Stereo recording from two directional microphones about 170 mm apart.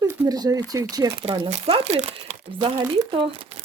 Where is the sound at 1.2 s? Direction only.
30° right (ahead or behind).